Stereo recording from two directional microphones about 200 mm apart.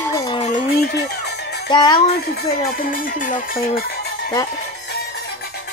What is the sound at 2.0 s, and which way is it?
Speech, 50° left (ahead or behind).